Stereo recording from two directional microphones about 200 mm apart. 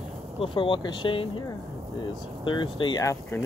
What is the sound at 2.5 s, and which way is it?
Speech, 25° left (ahead or behind).